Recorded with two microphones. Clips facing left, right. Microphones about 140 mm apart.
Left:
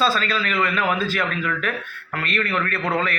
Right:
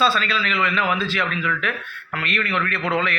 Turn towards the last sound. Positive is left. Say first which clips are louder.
# even
turn(degrees=40)  # may be behind; listen again after turning